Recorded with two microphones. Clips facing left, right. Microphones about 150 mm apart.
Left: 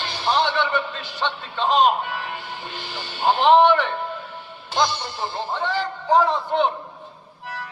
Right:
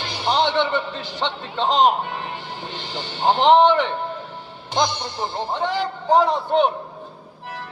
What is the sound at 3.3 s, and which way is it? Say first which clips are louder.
Speech: right 1 dB; 20° right (ahead or behind).